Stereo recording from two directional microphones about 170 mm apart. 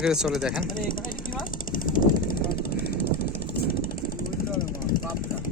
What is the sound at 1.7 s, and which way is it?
Vehicle, 55° left (ahead or behind).